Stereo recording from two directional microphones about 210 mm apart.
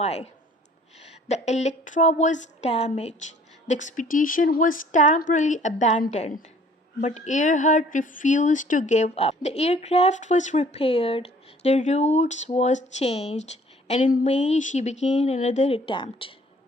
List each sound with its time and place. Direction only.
0.0 s speech: 30° left (ahead or behind)
1.3 s speech: 35° left (ahead or behind)